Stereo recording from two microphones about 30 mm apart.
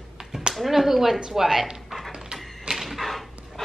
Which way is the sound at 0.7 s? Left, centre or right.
Centre.